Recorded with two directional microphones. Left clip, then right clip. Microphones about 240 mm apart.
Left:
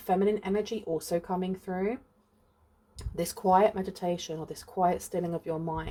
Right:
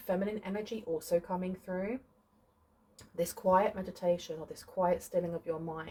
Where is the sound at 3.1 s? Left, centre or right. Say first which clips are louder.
Left 4 dB; left.